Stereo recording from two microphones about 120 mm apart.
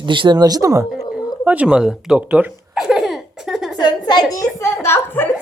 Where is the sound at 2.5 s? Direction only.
5° right (ahead or behind).